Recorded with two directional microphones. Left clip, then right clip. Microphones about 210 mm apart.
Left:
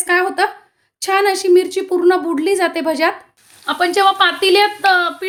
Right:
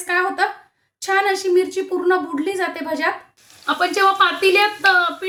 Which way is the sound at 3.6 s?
30° left (ahead or behind).